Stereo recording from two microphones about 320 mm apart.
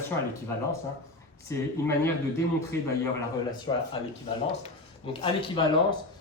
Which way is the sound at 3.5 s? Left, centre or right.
Centre.